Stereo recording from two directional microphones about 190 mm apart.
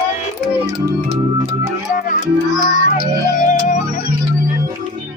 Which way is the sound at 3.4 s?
40° left (ahead or behind).